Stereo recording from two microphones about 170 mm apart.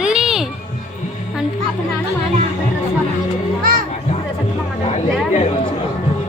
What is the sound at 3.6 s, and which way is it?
Music, 55° right (ahead or behind).